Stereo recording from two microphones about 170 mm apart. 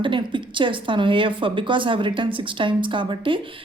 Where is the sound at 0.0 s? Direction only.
30° right (ahead or behind).